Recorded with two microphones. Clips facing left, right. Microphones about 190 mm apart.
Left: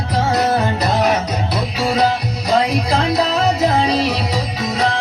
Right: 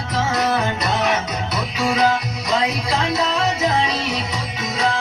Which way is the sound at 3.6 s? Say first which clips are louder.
Left 5 dB; 35° left (ahead or behind).